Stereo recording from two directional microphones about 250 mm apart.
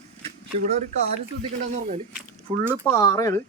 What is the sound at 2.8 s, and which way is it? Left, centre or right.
Speech, centre.